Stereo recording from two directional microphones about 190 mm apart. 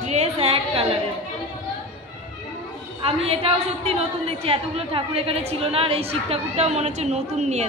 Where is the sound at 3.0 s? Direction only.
30° right (ahead or behind).